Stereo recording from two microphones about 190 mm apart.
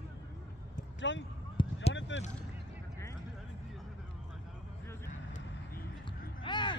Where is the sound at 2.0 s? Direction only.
75° left (ahead or behind).